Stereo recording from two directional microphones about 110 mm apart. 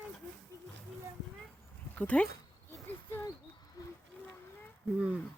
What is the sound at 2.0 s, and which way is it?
Speech, 15° left (ahead or behind).